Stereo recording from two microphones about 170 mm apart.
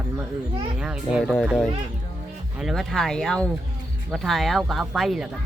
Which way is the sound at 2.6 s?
Centre (ahead or behind).